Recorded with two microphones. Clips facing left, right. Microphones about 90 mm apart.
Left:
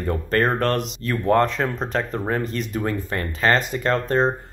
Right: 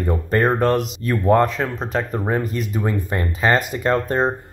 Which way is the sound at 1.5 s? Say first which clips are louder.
Even; centre (ahead or behind).